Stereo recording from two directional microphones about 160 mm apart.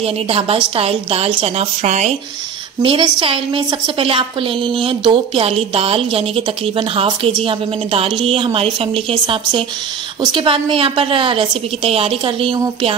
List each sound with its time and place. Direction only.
0.0 s a woman's voice: 35° right (ahead or behind)
2.8 s a woman's voice: 35° right (ahead or behind)